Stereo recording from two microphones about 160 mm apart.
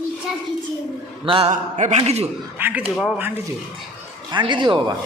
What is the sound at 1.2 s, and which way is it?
Speech, 35° right (ahead or behind).